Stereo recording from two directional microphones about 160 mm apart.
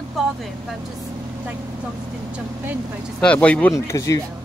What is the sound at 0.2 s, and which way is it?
Speech, centre (ahead or behind).